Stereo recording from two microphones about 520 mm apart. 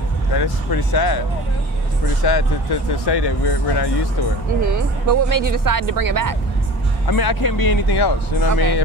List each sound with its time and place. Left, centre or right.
0.3 s speech: left
2.2 s speech: left
4.6 s speech: right
7.1 s speech: left